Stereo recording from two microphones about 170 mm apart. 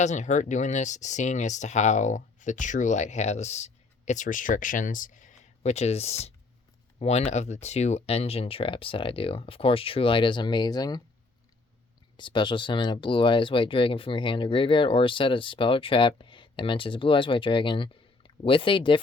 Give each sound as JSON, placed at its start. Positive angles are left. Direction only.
{"t": 0.0, "sound": "speech", "side_deg": 45}
{"t": 12.1, "sound": "speech", "side_deg": 30}